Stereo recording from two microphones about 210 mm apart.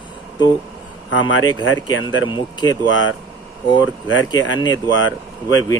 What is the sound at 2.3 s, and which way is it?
Speech, 20° left (ahead or behind).